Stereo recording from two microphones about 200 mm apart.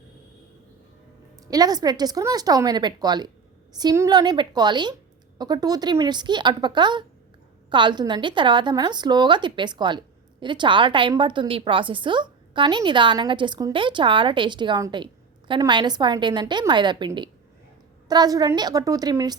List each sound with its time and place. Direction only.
1.5 s a woman's voice: 20° right (ahead or behind)